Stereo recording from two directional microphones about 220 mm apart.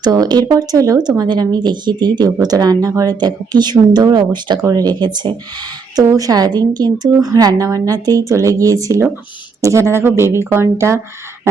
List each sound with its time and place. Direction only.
0.0 s a woman's voice: 20° right (ahead or behind)